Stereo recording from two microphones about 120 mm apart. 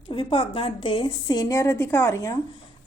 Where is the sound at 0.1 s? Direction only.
50° left (ahead or behind); by 2.4 s 25° left (ahead or behind).